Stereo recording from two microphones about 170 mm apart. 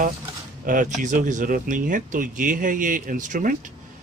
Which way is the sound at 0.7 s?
50° right (ahead or behind).